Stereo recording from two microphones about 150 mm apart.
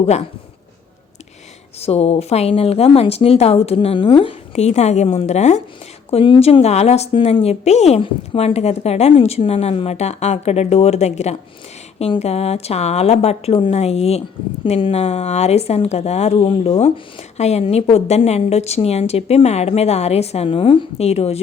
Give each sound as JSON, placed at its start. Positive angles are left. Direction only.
{"t": 0.0, "sound": "speech", "side_deg": 45}
{"t": 1.8, "sound": "speech", "side_deg": 45}
{"t": 6.1, "sound": "speech", "side_deg": 35}